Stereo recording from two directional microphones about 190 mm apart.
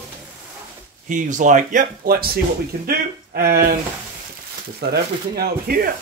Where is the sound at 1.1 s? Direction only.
40° right (ahead or behind).